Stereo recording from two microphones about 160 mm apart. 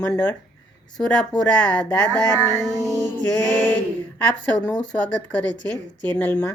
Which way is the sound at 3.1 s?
10° left (ahead or behind).